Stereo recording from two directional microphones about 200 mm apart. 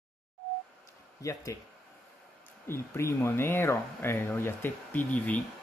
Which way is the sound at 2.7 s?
15° left (ahead or behind).